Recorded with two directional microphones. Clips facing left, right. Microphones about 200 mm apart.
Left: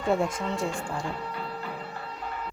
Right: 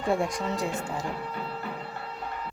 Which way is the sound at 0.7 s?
20° right (ahead or behind).